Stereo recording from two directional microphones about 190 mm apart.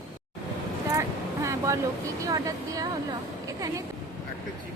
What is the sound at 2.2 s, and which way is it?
Speech, 20° right (ahead or behind).